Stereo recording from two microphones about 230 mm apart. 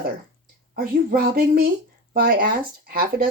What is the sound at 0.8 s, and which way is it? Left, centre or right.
Speech, right.